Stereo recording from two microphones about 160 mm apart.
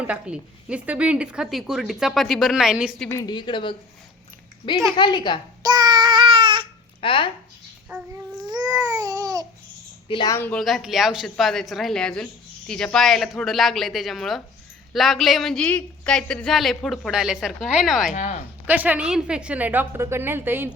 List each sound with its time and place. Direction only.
0.1 s a woman's voice: 5° right (ahead or behind)
3.1 s a woman's voice: 20° left (ahead or behind)
4.9 s a woman's voice: 30° left (ahead or behind)
5.6 s child singing: 25° right (ahead or behind)
7.0 s speech: 30° left (ahead or behind)
7.9 s child singing: 10° right (ahead or behind)
8.4 s babbling: 25° right (ahead or behind)
10.1 s a woman's voice: 30° left (ahead or behind)
10.3 s speech: 10° left (ahead or behind)
10.6 s a woman's voice: centre (ahead or behind)
18.1 s speech: 50° left (ahead or behind)
18.6 s a woman's voice: 10° right (ahead or behind)